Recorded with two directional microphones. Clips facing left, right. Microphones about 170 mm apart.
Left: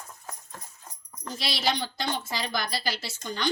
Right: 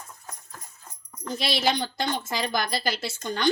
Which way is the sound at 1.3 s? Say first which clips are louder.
Right 3 dB; 55° right (ahead or behind).